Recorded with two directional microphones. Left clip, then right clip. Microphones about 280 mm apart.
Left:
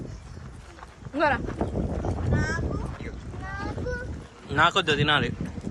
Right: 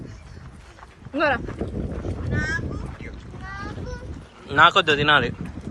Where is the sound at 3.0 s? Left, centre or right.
Left.